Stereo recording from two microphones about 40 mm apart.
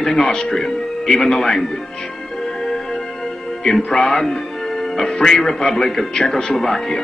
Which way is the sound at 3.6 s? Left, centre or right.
Centre.